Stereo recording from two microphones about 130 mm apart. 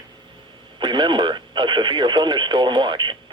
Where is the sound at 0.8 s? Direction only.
35° right (ahead or behind).